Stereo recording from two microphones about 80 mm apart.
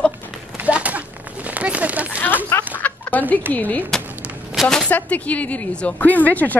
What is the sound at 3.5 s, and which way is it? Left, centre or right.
Speech, left.